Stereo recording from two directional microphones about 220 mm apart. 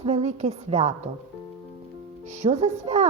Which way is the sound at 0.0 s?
30° right (ahead or behind).